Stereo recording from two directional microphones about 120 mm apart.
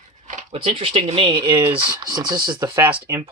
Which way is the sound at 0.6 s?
55° right (ahead or behind).